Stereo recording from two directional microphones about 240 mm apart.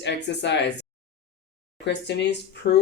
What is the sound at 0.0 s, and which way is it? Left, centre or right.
Speech, left.